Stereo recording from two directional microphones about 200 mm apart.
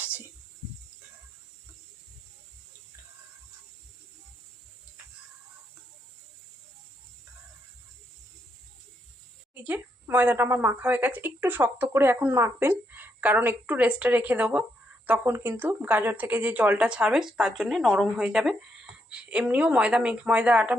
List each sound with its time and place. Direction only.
9.6 s a woman's voice: 10° right (ahead or behind)